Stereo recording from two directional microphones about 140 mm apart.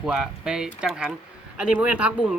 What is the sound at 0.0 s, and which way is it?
Speech, 5° right (ahead or behind).